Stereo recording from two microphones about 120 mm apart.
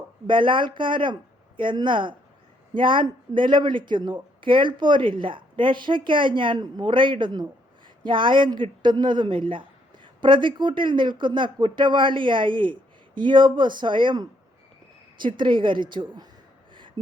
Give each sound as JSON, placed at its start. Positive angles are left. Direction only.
{"t": 0.3, "sound": "speech", "side_deg": -45}